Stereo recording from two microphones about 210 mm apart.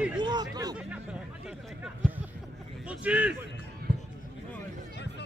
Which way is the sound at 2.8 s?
5° right (ahead or behind).